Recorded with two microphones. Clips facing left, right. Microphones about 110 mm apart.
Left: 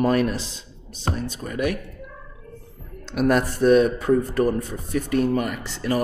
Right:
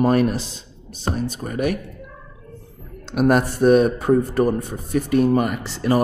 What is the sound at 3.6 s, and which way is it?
Speech, 45° right (ahead or behind).